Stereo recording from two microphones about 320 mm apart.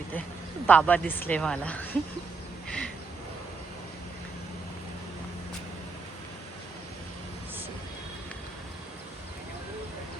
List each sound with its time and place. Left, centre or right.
0.7 s speech: centre